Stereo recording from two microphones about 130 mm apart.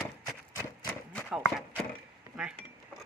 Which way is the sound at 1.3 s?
10° right (ahead or behind).